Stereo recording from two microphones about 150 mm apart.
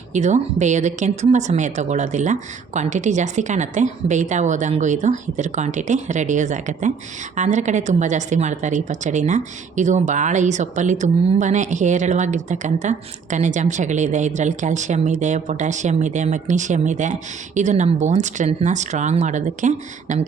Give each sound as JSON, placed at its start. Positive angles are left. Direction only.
{"t": 0.1, "sound": "a woman's voice", "side_deg": -50}